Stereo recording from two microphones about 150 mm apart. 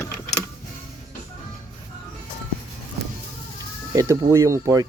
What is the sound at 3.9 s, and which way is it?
Speech, 20° right (ahead or behind).